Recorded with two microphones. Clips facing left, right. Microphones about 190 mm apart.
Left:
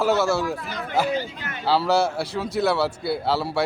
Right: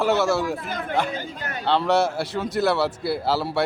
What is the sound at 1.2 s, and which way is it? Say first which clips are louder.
Speech: left 2 dB; 45° right (ahead or behind).